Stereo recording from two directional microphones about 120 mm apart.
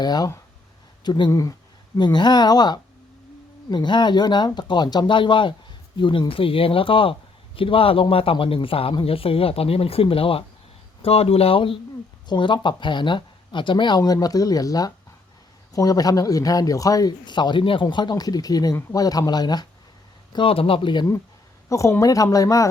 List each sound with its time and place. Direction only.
0.0 s speech: 35° left (ahead or behind)
1.3 s speech: 25° left (ahead or behind)
2.0 s speech: 35° left (ahead or behind)
20.3 s speech: 45° left (ahead or behind)
21.7 s speech: 25° left (ahead or behind)